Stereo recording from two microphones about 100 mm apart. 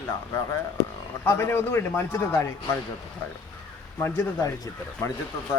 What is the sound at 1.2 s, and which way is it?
Speech, 25° left (ahead or behind).